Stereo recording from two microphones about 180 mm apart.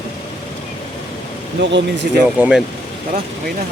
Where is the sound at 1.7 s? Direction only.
80° right.